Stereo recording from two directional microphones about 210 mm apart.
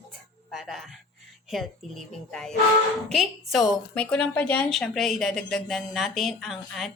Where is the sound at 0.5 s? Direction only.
Centre (ahead or behind).